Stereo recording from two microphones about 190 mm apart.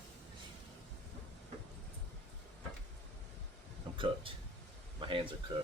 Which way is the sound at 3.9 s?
25° right (ahead or behind).